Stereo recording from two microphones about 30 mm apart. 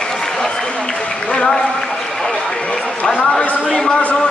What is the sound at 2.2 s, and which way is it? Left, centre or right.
Run, left.